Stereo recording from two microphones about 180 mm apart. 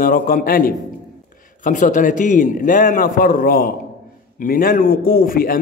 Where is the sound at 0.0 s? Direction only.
50° left (ahead or behind).